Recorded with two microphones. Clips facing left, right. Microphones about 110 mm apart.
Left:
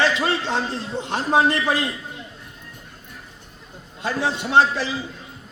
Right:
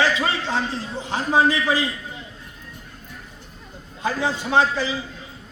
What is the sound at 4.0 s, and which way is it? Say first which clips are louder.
Speech: even; 70° left (ahead or behind).